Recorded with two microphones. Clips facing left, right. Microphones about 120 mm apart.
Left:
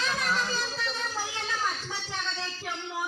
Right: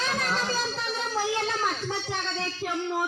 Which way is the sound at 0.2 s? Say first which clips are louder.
Right 2 dB; 35° right (ahead or behind).